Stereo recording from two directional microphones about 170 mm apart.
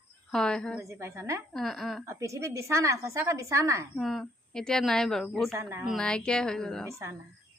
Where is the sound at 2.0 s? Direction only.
15° right (ahead or behind).